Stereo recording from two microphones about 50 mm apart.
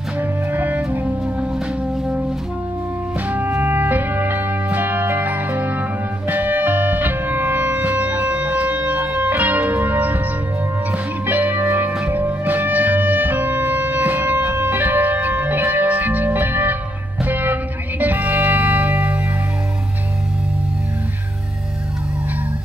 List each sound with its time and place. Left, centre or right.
0.2 s music: right
3.3 s music: right